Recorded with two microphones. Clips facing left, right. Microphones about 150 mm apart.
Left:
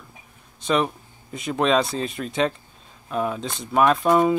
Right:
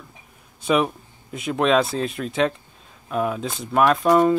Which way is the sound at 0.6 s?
5° right (ahead or behind).